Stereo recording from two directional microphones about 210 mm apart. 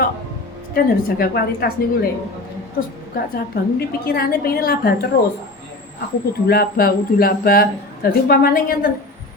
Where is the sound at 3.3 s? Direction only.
45° left (ahead or behind).